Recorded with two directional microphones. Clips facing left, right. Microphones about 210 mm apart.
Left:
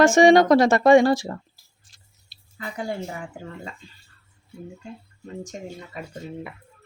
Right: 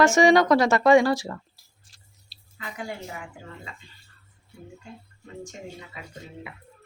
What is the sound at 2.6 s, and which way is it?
Speech, 35° left (ahead or behind).